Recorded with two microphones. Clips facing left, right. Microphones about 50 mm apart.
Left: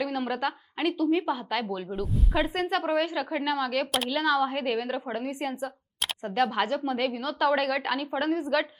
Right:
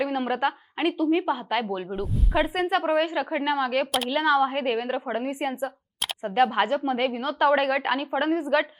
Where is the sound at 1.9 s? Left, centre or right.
Centre.